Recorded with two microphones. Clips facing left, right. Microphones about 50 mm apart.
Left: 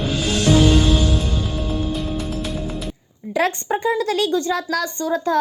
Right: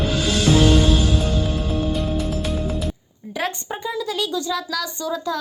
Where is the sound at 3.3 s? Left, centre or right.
Left.